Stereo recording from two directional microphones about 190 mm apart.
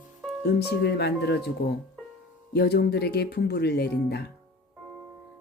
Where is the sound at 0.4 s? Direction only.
60° left (ahead or behind).